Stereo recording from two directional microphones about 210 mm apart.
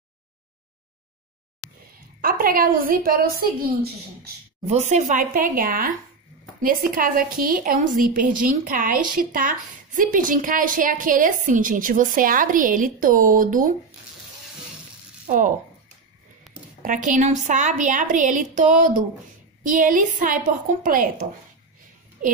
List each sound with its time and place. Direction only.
2.2 s a woman's voice: 45° right (ahead or behind)
4.6 s a woman's voice: 35° right (ahead or behind)
15.2 s speech: 40° right (ahead or behind)
16.8 s a woman's voice: 40° right (ahead or behind)